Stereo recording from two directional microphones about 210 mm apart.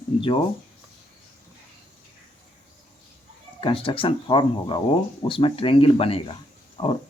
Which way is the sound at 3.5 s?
25° left (ahead or behind).